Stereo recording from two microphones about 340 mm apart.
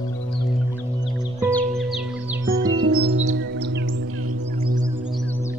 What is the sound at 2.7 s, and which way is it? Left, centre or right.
Music, right.